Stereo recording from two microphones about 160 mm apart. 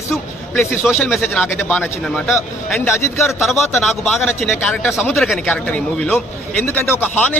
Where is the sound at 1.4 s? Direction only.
10° left (ahead or behind).